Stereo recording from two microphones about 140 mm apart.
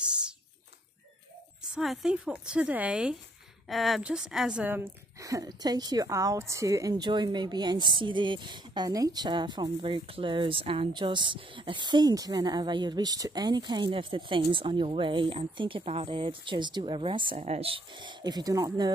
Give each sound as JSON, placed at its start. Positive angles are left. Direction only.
{"t": 1.8, "sound": "a woman's voice", "side_deg": -5}
{"t": 5.2, "sound": "a woman's voice", "side_deg": -25}
{"t": 17.4, "sound": "a woman's voice", "side_deg": -50}